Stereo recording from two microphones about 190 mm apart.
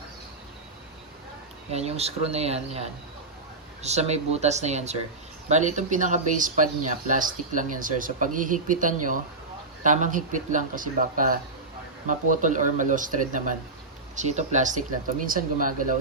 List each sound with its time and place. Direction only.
1.7 s speech: 35° right (ahead or behind)
3.8 s speech: 35° right (ahead or behind)